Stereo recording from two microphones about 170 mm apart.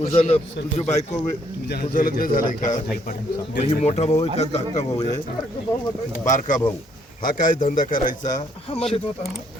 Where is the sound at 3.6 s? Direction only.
40° left (ahead or behind).